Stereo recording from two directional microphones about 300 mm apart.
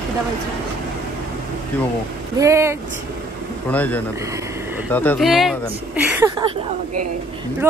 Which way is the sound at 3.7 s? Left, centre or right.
Centre.